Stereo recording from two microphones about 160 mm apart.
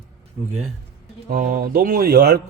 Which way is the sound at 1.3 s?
60° right (ahead or behind).